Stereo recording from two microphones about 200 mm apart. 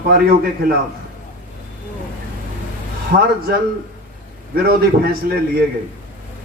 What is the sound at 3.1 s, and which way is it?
Speech, 45° right (ahead or behind).